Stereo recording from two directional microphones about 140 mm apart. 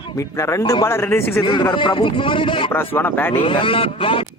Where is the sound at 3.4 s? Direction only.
40° left (ahead or behind).